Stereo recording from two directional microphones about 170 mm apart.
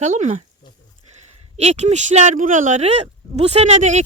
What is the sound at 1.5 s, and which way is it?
Speech, 40° right (ahead or behind).